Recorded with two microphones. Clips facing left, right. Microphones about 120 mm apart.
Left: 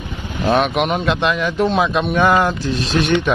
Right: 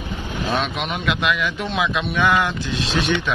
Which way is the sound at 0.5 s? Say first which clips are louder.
Left 9 dB; 55° left (ahead or behind).